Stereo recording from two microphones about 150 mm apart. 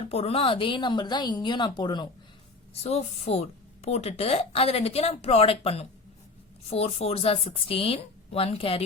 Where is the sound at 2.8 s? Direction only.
45° left (ahead or behind).